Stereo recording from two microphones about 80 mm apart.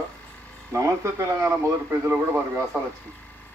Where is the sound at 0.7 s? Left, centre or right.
Right.